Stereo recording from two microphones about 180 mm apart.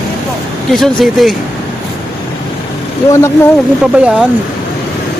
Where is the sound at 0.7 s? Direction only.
Centre (ahead or behind).